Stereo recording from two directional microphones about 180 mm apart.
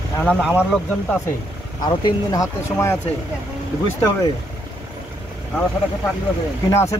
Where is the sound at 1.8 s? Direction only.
20° left (ahead or behind).